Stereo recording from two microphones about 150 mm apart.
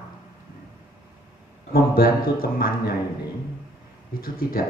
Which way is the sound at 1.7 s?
75° left (ahead or behind).